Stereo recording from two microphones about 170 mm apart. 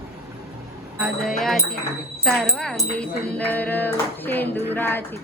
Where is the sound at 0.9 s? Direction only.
Centre (ahead or behind).